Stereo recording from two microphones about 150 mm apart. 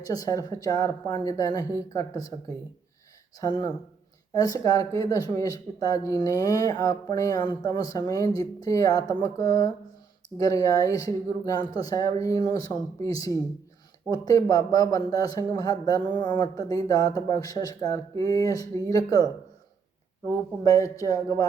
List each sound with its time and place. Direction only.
0.1 s speech: 25° left (ahead or behind)